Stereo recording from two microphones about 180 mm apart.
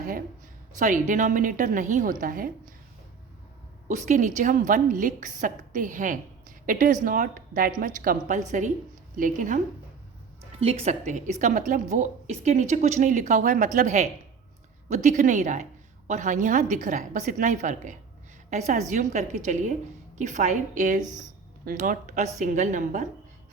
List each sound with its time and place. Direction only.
0.8 s a woman's voice: 45° right (ahead or behind)
3.8 s a woman's voice: 45° right (ahead or behind)
10.6 s a woman's voice: 35° right (ahead or behind)
21.0 s speech: 20° right (ahead or behind)
21.6 s a woman's voice: 50° right (ahead or behind)